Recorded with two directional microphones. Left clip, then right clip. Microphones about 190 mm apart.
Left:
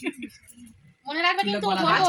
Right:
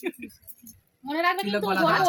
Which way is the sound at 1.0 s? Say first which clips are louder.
Left 2 dB; 45° right (ahead or behind).